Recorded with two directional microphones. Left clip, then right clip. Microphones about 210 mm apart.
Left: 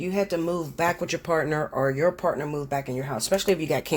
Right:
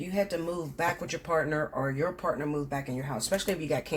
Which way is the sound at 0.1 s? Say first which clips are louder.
Left 4 dB; 50° left (ahead or behind).